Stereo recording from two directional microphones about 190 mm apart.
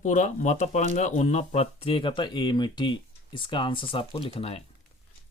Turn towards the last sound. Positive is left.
turn(degrees=30)  # may be behind; listen again after turning